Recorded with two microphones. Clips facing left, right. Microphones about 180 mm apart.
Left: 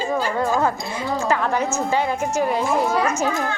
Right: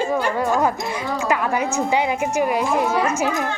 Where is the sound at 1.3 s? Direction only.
10° right (ahead or behind).